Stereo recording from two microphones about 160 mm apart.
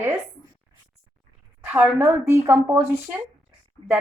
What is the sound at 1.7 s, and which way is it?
A woman's voice, 10° right (ahead or behind).